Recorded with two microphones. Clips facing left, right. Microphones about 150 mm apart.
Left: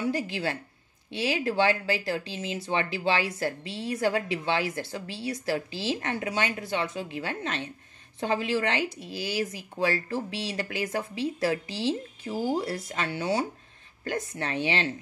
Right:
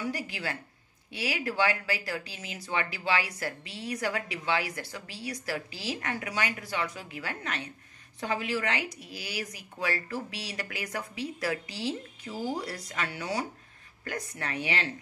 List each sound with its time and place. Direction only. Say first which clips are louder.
0.0 s speech: left 6 dB; 30° left (ahead or behind)